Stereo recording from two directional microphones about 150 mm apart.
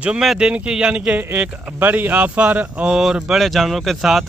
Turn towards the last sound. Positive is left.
turn(degrees=0)  # may be behind; listen again after turning